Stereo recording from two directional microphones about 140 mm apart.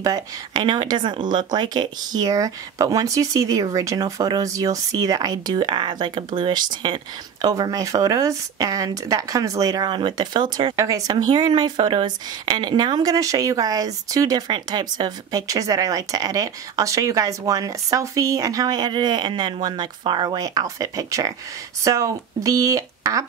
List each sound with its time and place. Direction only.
0.0 s speech: 30° right (ahead or behind)